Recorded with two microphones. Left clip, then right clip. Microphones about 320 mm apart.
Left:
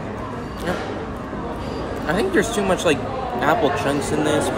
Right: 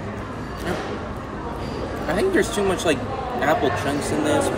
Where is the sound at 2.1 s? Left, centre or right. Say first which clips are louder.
Left 1 dB; centre.